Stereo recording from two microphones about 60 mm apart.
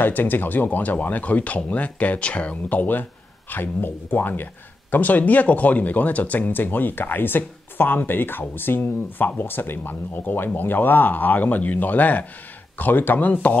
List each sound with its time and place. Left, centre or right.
0.0 s speech: left